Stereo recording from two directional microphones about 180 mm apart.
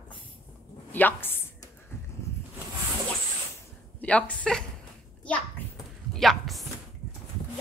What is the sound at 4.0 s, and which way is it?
Speech, 5° left (ahead or behind).